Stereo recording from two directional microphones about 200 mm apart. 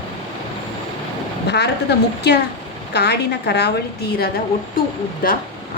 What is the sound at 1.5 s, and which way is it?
Speech, 55° left (ahead or behind).